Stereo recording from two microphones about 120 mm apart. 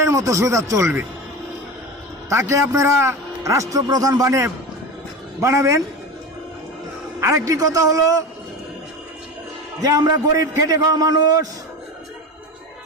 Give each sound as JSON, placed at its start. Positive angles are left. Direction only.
{"t": 0.0, "sound": "a man's voice", "side_deg": -25}
{"t": 2.3, "sound": "a man's voice", "side_deg": -25}
{"t": 7.2, "sound": "a man's voice", "side_deg": -25}
{"t": 9.8, "sound": "a man's voice", "side_deg": -35}